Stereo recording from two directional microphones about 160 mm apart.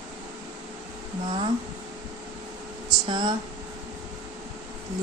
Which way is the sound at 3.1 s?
30° right (ahead or behind).